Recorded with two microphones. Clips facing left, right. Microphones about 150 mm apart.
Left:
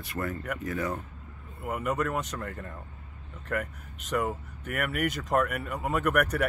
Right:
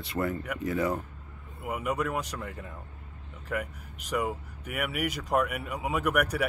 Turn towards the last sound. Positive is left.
turn(degrees=-5)  # may be behind; listen again after turning